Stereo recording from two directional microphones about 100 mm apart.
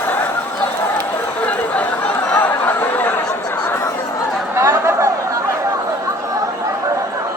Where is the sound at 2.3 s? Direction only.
20° left (ahead or behind).